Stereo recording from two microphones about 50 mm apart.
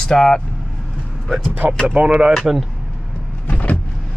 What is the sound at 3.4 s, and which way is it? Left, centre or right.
Power windows, left.